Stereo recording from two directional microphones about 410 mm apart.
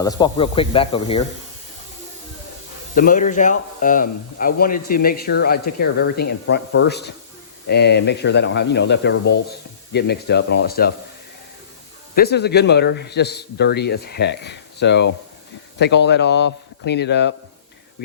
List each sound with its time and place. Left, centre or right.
0.0 s speech: centre
2.9 s speech: centre
12.1 s speech: left